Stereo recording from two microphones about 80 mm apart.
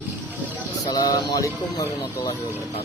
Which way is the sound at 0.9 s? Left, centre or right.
Left.